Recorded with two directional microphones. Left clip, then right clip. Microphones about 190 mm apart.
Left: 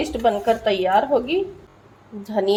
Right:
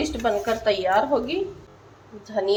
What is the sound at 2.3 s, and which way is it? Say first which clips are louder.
Speech: left 3 dB; 60° left (ahead or behind).